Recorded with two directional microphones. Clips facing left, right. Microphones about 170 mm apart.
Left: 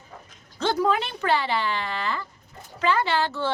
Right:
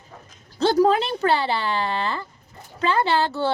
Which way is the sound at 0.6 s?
35° right (ahead or behind).